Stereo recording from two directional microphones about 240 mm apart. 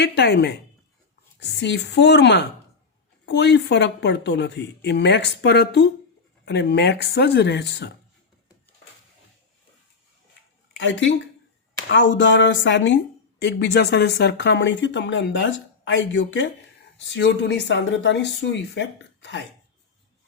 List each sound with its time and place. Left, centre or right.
0.0 s speech: left
1.5 s speech: left
10.8 s speech: left